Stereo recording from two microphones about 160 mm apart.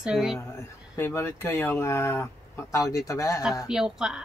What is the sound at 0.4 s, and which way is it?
Speech, 15° left (ahead or behind).